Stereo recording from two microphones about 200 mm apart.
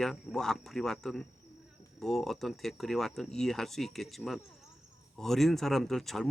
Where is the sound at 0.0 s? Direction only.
Centre (ahead or behind).